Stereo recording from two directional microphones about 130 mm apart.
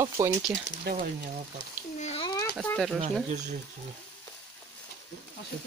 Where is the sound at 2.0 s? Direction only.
55° left (ahead or behind).